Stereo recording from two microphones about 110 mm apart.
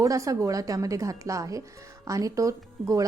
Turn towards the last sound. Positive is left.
turn(degrees=-30)  # may be behind; listen again after turning